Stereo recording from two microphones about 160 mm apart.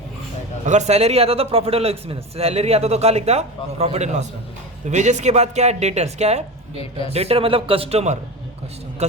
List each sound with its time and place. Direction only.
0.6 s a man's voice: 45° right (ahead or behind)